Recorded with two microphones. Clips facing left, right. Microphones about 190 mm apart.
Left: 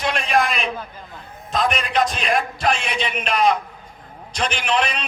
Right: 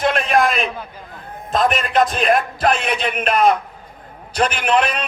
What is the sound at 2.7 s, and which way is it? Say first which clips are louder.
Speech: right 4 dB; 50° right (ahead or behind).